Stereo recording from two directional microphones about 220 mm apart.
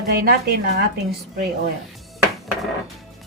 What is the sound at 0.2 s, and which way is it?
Speech, 45° right (ahead or behind).